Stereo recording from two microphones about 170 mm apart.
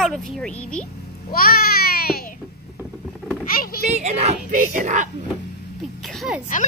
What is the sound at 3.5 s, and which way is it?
Speech, 60° left (ahead or behind).